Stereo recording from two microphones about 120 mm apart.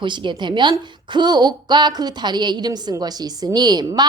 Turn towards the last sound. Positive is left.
turn(degrees=-35)  # may be behind; listen again after turning